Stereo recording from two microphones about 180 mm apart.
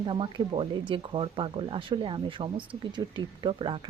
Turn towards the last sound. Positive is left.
turn(degrees=-25)  # may be behind; listen again after turning